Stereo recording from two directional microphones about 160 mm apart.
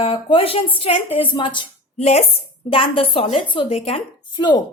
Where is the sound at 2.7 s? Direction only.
35° left (ahead or behind).